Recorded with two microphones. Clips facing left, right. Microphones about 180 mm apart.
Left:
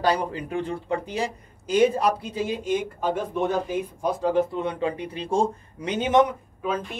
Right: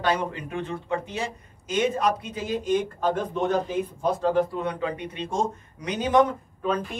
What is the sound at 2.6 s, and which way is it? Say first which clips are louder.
Speech: right 1 dB; 10° left (ahead or behind).